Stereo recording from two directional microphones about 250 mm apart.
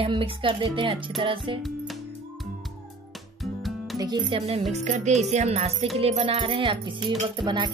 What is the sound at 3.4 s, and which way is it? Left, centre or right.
Music, centre.